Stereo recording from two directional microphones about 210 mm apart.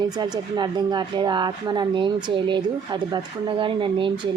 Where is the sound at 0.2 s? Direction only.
20° right (ahead or behind).